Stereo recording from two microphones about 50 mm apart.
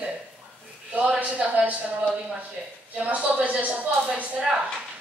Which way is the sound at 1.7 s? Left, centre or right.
Right.